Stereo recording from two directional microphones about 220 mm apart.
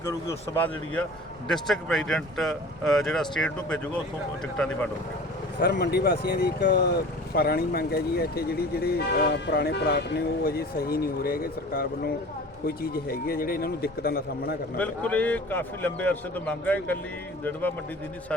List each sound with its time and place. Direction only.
0.0 s speech: 15° left (ahead or behind)
5.5 s speech: 50° left (ahead or behind)
14.8 s speech: 5° left (ahead or behind)